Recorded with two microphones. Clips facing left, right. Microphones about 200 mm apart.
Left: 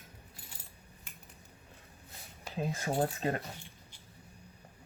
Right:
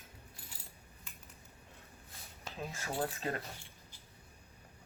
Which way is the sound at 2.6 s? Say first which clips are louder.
Left 6 dB; 35° left (ahead or behind).